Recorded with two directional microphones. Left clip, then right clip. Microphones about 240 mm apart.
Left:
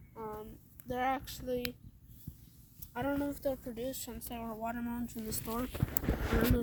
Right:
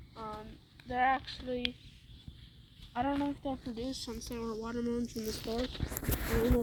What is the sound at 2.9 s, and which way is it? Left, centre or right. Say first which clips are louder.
A woman's voice: right 2 dB; left.